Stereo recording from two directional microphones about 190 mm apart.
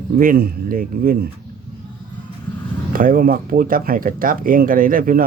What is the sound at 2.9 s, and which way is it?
Speech, 45° right (ahead or behind).